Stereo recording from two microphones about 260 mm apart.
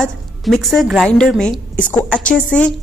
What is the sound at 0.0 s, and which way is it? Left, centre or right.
A woman's voice, centre.